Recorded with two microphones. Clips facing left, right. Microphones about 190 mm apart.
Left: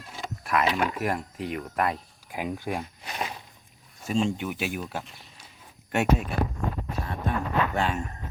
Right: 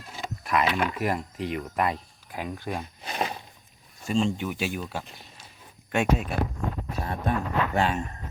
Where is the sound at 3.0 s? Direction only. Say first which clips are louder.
Right 4 dB; 30° right (ahead or behind).